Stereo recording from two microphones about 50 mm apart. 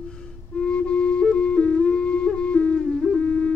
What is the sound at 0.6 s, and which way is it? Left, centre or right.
Music, left.